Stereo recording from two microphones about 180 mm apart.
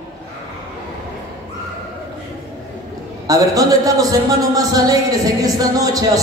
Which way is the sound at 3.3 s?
20° right (ahead or behind).